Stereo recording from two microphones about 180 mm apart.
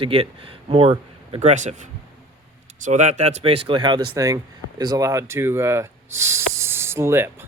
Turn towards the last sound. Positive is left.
turn(degrees=-15)  # may be behind; listen again after turning